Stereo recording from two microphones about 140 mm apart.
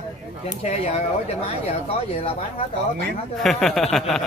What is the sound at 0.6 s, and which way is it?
Speech, 50° left (ahead or behind).